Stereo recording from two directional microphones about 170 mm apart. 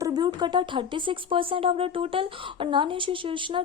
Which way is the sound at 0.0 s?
25° right (ahead or behind).